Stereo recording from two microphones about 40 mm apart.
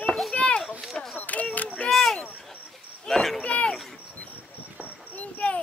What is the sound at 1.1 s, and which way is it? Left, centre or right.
Single-lens reflex camera, left.